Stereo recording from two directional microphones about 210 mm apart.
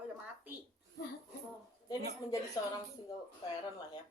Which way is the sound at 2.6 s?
20° left (ahead or behind).